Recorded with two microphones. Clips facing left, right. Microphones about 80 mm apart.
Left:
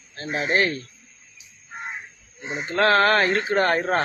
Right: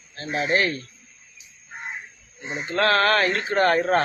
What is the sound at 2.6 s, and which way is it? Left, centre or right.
Speech, left.